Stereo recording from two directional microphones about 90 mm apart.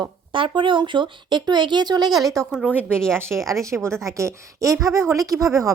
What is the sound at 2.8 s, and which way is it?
Speech, 10° left (ahead or behind).